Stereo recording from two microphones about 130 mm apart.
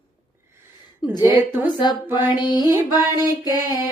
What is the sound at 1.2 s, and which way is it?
Speech, 15° right (ahead or behind).